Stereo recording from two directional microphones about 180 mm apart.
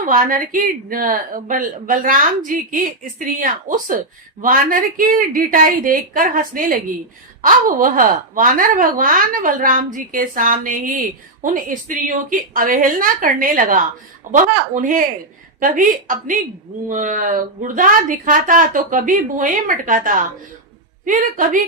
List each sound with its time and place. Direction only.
0.0 s speech: 50° right (ahead or behind)